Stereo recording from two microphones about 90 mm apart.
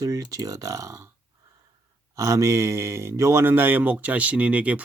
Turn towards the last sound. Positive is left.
turn(degrees=-15)  # may be behind; listen again after turning